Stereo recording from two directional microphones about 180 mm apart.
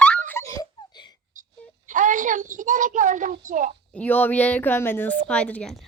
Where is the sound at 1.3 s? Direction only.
45° right (ahead or behind).